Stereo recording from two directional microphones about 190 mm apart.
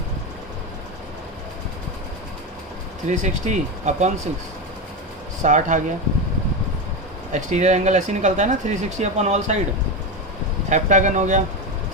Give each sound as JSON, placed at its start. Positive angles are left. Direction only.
{"t": 3.1, "sound": "speech", "side_deg": -40}
{"t": 5.4, "sound": "speech", "side_deg": -40}
{"t": 7.3, "sound": "speech", "side_deg": -40}
{"t": 10.7, "sound": "speech", "side_deg": -40}